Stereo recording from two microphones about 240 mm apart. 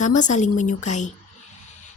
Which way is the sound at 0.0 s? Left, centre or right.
Left.